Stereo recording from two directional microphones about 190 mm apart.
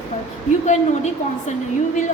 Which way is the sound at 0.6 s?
35° left (ahead or behind).